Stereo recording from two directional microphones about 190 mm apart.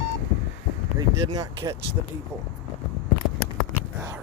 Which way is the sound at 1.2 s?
20° right (ahead or behind).